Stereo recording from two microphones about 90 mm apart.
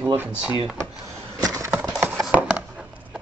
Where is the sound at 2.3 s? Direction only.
15° right (ahead or behind).